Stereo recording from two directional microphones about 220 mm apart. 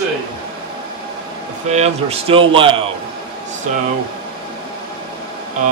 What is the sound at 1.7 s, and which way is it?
A man's voice, 30° right (ahead or behind).